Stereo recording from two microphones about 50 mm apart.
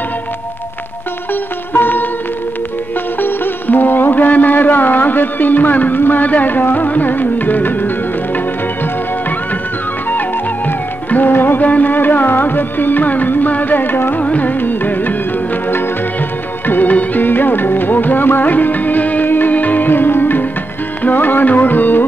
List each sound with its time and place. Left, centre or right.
1.3 s music: left
3.2 s music: left
11.1 s music: left
14.2 s music: left
16.6 s music: left